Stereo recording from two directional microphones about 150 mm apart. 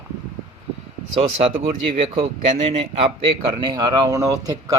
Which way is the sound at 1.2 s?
40° right (ahead or behind).